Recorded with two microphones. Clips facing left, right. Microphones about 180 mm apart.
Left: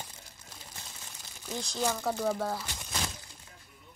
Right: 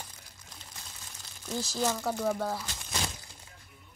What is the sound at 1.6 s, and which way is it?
Speech, 5° right (ahead or behind).